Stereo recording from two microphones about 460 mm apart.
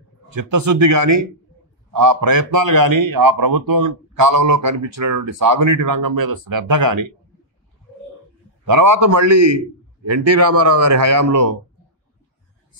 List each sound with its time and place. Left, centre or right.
0.3 s a man's voice: right
8.6 s a man's voice: right